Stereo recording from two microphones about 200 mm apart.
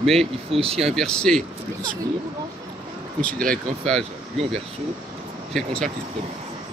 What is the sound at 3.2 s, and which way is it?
Speech, 5° left (ahead or behind).